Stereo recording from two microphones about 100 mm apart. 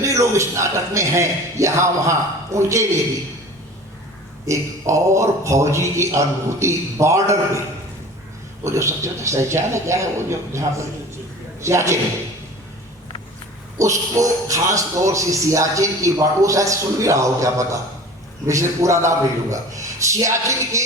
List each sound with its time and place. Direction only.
0.0 s a man's voice: 30° right (ahead or behind)
4.4 s a man's voice: 30° right (ahead or behind)
8.6 s a man's voice: 30° right (ahead or behind)
13.7 s speech: 30° right (ahead or behind)